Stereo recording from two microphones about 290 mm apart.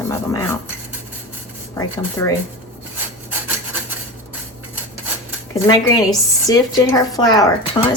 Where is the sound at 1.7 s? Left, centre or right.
Centre.